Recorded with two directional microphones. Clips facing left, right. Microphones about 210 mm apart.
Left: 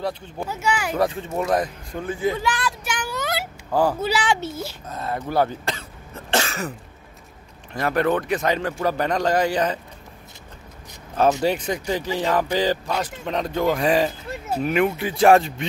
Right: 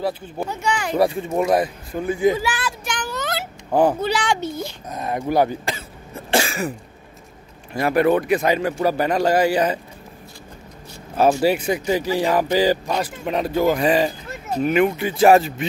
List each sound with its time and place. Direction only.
0.5 s speech: 5° left (ahead or behind)
0.9 s a man's voice: 10° right (ahead or behind)
2.8 s child singing: 10° left (ahead or behind)
3.7 s speech: 20° right (ahead or behind)
4.0 s speech: 5° left (ahead or behind)
4.8 s cough: 15° right (ahead or behind)
7.7 s a man's voice: 10° right (ahead or behind)
11.4 s a man's voice: 10° right (ahead or behind)